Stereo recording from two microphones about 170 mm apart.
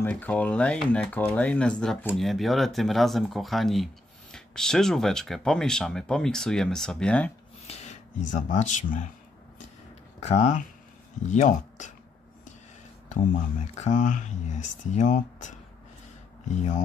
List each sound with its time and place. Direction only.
0.0 s speech: 10° left (ahead or behind)
7.6 s a sound: 40° left (ahead or behind)
8.4 s speech: 45° left (ahead or behind)
10.2 s speech: 45° left (ahead or behind)
13.1 s speech: 45° left (ahead or behind)